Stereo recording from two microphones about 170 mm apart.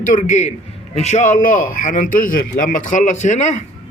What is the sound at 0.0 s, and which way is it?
A man's voice, 50° left (ahead or behind).